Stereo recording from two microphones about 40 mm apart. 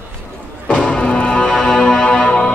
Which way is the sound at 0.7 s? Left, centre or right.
Left.